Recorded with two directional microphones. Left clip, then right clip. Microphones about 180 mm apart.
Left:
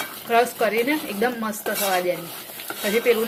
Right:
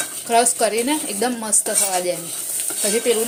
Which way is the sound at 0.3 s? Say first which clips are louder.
Right 2 dB; 20° right (ahead or behind).